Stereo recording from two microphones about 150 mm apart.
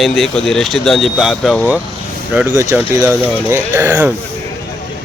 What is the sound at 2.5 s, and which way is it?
Speech, 20° right (ahead or behind).